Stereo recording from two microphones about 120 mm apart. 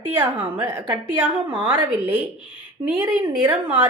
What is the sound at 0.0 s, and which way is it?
A woman's voice, 15° right (ahead or behind).